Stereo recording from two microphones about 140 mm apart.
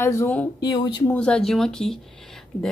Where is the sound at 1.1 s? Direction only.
5° left (ahead or behind).